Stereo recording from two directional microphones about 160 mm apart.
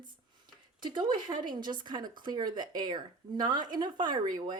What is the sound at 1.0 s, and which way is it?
Speech, 30° right (ahead or behind).